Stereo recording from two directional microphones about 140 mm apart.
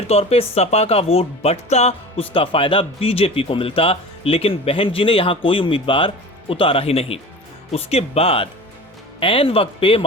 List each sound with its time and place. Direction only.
0.1 s speech: 45° left (ahead or behind)